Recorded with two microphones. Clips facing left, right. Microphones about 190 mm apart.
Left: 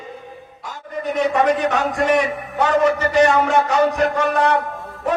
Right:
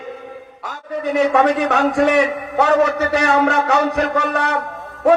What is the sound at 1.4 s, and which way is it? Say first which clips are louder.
A man's voice: right 2 dB; 65° right (ahead or behind).